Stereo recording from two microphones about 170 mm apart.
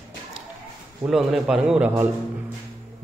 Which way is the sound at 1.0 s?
Centre (ahead or behind).